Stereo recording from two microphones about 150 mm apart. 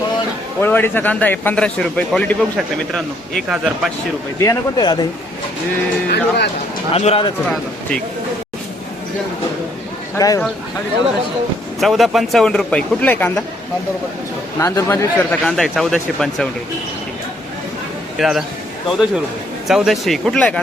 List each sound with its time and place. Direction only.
0.6 s a man's voice: 15° left (ahead or behind)
4.4 s speech: 30° left (ahead or behind)
6.1 s speech: 90° left
6.9 s speech: 45° left (ahead or behind)
7.4 s speech: 5° left (ahead or behind)
10.2 s speech: 25° left (ahead or behind)
11.8 s speech: centre (ahead or behind)
14.6 s speech: 15° left (ahead or behind)
18.2 s speech: centre (ahead or behind)